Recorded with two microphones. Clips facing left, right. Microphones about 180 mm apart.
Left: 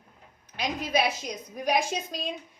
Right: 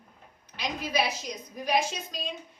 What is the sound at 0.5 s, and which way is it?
A woman's voice, 50° left (ahead or behind).